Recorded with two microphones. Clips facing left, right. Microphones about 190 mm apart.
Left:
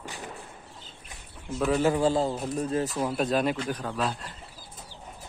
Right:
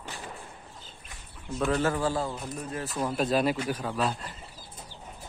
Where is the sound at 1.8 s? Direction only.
20° left (ahead or behind).